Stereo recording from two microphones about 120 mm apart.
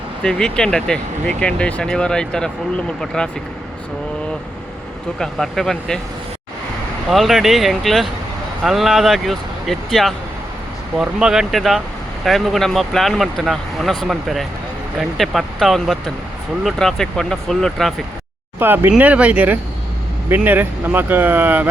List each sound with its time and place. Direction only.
0.2 s speech: 5° left (ahead or behind)
5.2 s speech: 5° left (ahead or behind)
7.1 s speech: centre (ahead or behind)
18.6 s speech: 15° right (ahead or behind)